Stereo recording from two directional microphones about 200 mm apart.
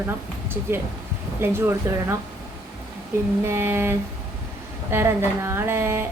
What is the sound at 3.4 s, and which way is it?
A woman's voice, 10° right (ahead or behind).